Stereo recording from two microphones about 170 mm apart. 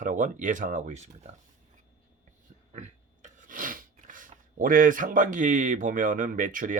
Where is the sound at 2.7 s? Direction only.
45° right (ahead or behind).